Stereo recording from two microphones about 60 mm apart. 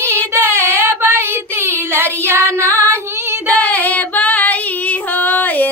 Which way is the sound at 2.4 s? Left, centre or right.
Left.